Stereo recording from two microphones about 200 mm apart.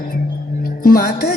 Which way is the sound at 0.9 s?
50° left (ahead or behind).